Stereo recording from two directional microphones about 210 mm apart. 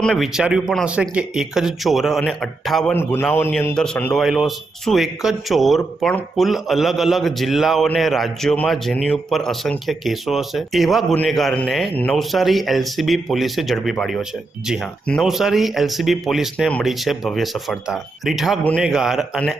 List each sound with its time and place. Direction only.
0.0 s speech: centre (ahead or behind)